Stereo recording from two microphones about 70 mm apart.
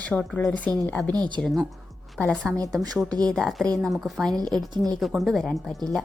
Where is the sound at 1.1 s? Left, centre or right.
Right.